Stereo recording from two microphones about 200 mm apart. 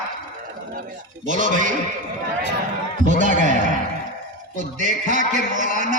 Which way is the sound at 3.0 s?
40° right (ahead or behind).